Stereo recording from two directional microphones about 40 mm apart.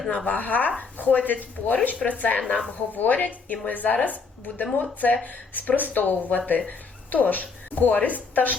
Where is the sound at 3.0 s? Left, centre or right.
Left.